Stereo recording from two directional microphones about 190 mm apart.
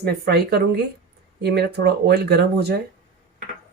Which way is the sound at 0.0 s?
60° right (ahead or behind).